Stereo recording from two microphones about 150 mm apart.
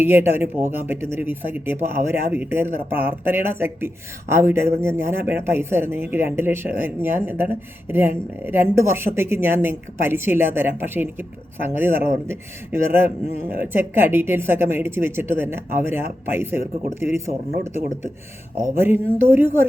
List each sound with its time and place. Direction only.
0.0 s speech: 15° right (ahead or behind)
18.7 s speech: 15° right (ahead or behind)